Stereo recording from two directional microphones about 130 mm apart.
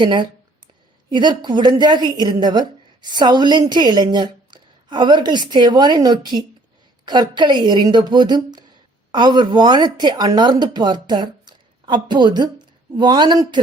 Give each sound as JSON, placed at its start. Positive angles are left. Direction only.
{"t": 0.0, "sound": "a woman's voice", "side_deg": -40}